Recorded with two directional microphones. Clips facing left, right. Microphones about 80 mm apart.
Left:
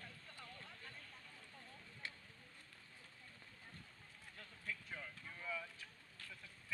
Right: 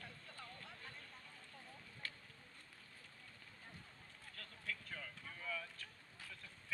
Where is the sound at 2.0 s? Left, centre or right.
Centre.